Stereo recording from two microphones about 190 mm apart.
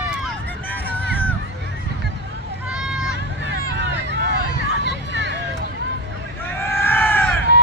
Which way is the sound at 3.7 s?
65° right (ahead or behind).